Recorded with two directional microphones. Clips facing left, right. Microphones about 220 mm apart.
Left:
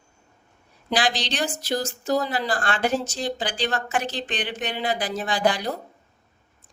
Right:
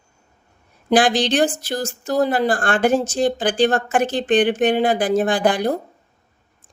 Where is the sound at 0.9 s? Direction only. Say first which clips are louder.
Right 9 dB; 50° right (ahead or behind).